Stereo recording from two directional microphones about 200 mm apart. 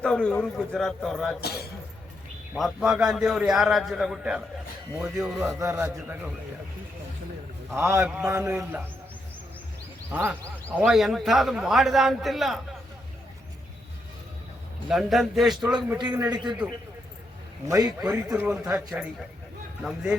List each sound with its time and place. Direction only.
0.0 s a man's voice: 5° left (ahead or behind)
1.4 s a man's voice: 50° left (ahead or behind)
2.6 s a man's voice: centre (ahead or behind)
7.8 s a man's voice: 15° right (ahead or behind)
10.1 s a man's voice: 10° right (ahead or behind)
14.8 s a man's voice: centre (ahead or behind)
16.1 s a man's voice: 20° right (ahead or behind)
17.7 s a man's voice: 20° right (ahead or behind)